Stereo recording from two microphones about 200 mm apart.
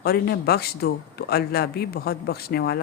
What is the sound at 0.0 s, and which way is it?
A woman's voice, 50° left (ahead or behind).